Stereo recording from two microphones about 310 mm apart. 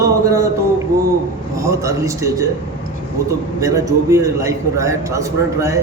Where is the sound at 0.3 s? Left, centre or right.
Centre.